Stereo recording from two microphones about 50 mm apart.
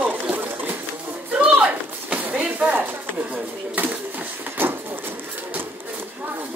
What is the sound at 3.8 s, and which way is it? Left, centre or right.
Sewing machine, right.